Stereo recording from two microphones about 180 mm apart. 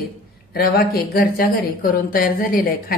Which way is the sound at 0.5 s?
60° left (ahead or behind).